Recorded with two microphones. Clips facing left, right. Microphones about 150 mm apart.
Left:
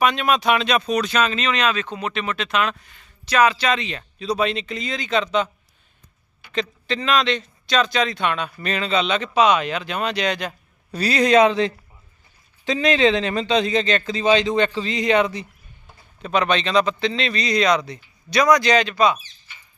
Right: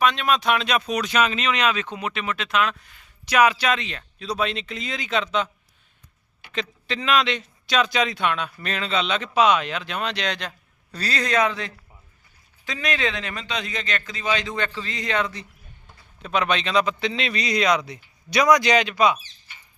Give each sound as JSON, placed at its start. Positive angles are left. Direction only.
{"t": 0.0, "sound": "speech", "side_deg": 5}
{"t": 6.5, "sound": "speech", "side_deg": -5}
{"t": 16.2, "sound": "speech", "side_deg": -5}